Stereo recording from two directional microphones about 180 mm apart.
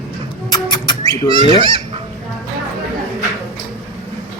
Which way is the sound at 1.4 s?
25° right (ahead or behind).